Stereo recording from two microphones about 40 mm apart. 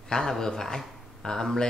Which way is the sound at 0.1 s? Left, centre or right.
Centre.